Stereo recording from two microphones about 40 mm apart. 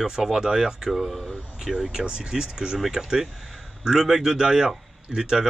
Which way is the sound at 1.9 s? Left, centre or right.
Right.